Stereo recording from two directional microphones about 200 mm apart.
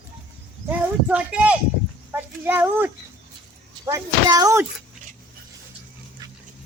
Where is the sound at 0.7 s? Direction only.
5° right (ahead or behind).